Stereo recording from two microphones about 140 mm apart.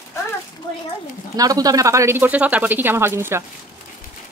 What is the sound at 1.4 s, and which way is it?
Speech, 25° right (ahead or behind).